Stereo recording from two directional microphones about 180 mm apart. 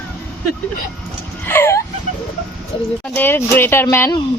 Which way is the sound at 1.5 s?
15° left (ahead or behind).